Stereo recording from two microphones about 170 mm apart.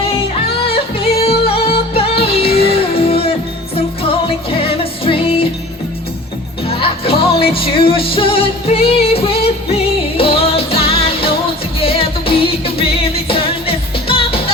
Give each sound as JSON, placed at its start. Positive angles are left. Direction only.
{"t": 0.9, "sound": "music", "side_deg": 35}
{"t": 6.7, "sound": "music", "side_deg": 35}